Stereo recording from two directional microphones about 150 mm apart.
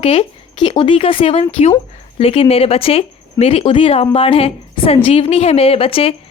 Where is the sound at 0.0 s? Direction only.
40° left (ahead or behind).